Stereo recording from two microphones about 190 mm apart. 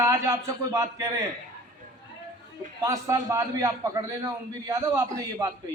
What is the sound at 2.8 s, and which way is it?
A man's voice, 15° right (ahead or behind).